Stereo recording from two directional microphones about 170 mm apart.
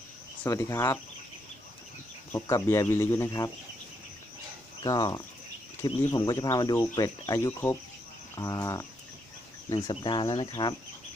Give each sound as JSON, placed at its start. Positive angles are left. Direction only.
{"t": 0.4, "sound": "speech", "side_deg": 15}
{"t": 2.3, "sound": "speech", "side_deg": 15}
{"t": 4.8, "sound": "speech", "side_deg": 25}